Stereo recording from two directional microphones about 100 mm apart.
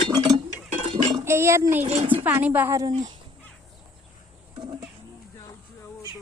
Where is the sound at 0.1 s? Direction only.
40° right (ahead or behind).